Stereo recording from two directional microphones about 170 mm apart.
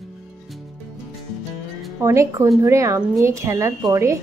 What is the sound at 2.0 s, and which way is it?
Speech, 15° right (ahead or behind).